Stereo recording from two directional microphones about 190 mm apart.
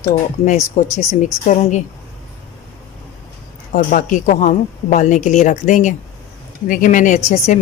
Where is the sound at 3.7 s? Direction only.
45° left (ahead or behind).